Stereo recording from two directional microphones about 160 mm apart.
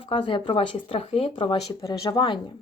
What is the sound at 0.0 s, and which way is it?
Speech, 35° left (ahead or behind).